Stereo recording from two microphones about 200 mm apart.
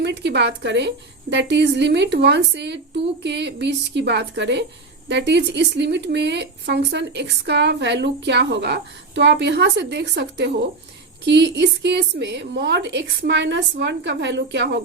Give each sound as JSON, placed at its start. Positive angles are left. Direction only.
{"t": 0.0, "sound": "speech", "side_deg": -60}